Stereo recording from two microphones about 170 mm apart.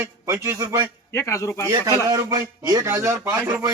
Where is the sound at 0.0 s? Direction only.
15° right (ahead or behind).